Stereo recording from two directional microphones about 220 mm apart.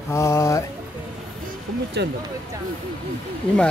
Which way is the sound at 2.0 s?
50° right (ahead or behind).